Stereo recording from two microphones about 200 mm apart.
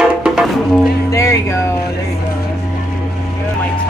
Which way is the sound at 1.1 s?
15° left (ahead or behind).